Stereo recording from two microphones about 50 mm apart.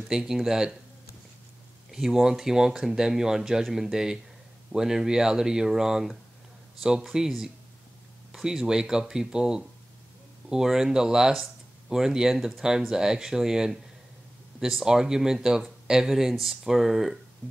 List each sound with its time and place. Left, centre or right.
0.1 s speech: centre
1.9 s speech: centre